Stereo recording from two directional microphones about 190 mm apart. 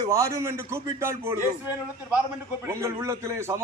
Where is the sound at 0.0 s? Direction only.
15° right (ahead or behind).